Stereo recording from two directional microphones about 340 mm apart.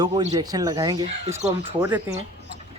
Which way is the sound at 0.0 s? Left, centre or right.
Centre.